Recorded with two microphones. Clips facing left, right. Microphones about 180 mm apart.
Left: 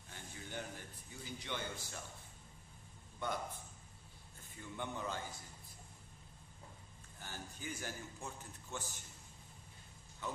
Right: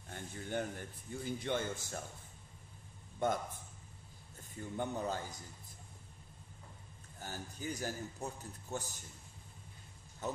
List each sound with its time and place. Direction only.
0.1 s speech: 50° right (ahead or behind)
3.2 s a man's voice: 45° right (ahead or behind)
4.4 s a man's voice: 40° right (ahead or behind)
7.2 s a man's voice: 40° right (ahead or behind)
10.2 s a sound: 40° right (ahead or behind)